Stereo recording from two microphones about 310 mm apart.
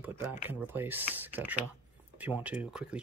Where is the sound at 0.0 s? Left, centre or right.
Centre.